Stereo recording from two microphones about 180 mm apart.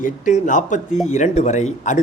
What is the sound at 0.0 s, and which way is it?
A man's voice, 45° left (ahead or behind).